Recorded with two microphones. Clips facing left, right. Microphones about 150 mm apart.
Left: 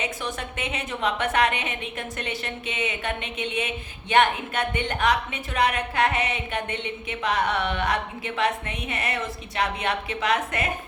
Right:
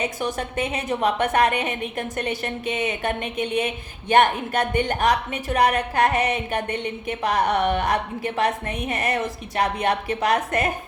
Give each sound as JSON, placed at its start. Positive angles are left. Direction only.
{"t": 0.0, "sound": "a woman's voice", "side_deg": -40}